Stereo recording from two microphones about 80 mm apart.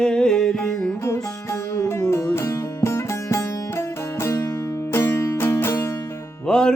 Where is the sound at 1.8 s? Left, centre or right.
Left.